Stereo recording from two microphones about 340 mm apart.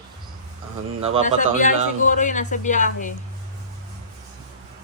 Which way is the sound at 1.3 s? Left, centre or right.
Left.